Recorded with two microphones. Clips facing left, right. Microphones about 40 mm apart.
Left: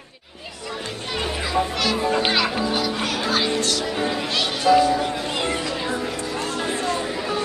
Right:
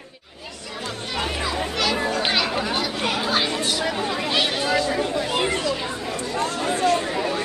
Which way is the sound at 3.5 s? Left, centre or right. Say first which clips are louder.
Left 1 dB; centre.